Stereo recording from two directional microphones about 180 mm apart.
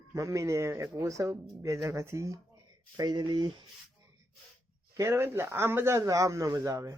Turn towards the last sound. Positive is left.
turn(degrees=-15)  # may be behind; listen again after turning